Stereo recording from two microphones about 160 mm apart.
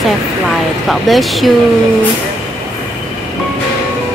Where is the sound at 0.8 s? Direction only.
Centre (ahead or behind).